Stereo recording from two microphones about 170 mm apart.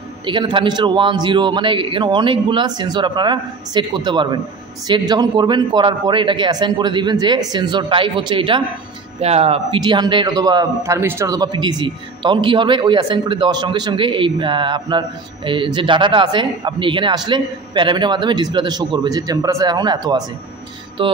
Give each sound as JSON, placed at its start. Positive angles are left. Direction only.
{"t": 0.2, "sound": "a man's voice", "side_deg": -30}